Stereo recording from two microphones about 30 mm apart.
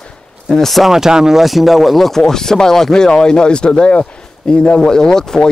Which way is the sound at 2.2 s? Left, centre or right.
Centre.